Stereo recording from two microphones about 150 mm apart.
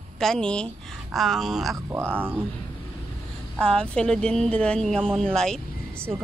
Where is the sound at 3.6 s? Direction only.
5° left (ahead or behind).